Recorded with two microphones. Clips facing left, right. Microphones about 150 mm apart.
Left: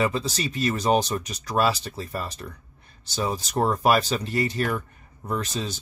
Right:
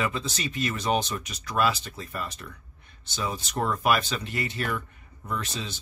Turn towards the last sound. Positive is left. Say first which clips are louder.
# left 5 dB
turn(degrees=40)  # may be behind; listen again after turning